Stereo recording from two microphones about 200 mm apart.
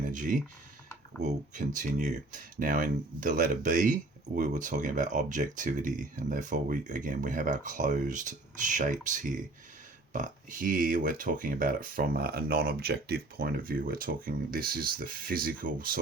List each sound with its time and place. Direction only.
0.1 s speech: 40° right (ahead or behind)